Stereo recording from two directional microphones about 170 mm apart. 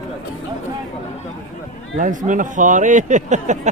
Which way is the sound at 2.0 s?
50° right (ahead or behind).